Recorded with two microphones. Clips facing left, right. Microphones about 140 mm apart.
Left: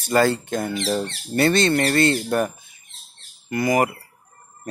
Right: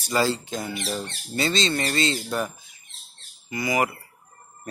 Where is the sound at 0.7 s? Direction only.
90° left; by 2.5 s 55° left (ahead or behind).